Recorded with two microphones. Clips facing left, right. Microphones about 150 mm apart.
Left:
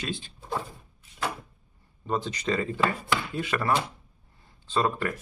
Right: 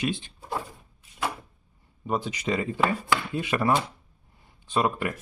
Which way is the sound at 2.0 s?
10° right (ahead or behind).